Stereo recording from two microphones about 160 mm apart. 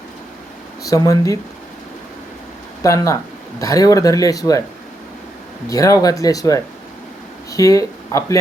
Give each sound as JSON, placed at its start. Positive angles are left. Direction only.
{"t": 0.9, "sound": "speech", "side_deg": 20}
{"t": 2.8, "sound": "speech", "side_deg": 20}
{"t": 5.6, "sound": "speech", "side_deg": 20}